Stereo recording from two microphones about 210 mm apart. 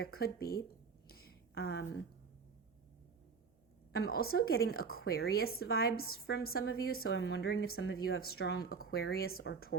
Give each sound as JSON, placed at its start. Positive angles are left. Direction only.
{"t": 0.0, "sound": "a woman's voice", "side_deg": 50}
{"t": 1.0, "sound": "a sound", "side_deg": 45}
{"t": 3.9, "sound": "a woman's voice", "side_deg": 45}